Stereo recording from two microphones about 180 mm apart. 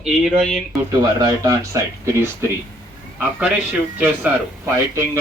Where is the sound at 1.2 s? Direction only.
15° right (ahead or behind).